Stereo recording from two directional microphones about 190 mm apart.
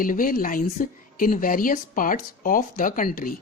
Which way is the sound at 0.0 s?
45° left (ahead or behind).